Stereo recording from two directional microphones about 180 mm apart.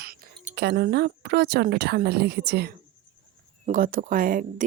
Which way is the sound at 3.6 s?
50° right (ahead or behind).